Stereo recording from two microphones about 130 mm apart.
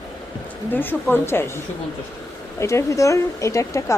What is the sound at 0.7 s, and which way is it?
A woman's voice, 15° left (ahead or behind).